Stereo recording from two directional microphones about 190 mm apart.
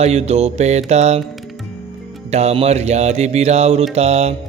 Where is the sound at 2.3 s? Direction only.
35° right (ahead or behind).